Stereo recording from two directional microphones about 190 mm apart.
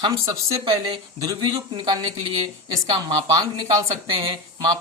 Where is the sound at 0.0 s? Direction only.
20° right (ahead or behind).